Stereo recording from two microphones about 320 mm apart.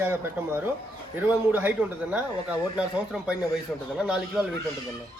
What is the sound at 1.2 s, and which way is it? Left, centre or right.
A man's voice, centre.